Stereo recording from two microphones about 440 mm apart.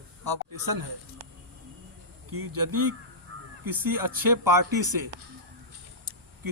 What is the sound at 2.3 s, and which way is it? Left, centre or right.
Speech, right.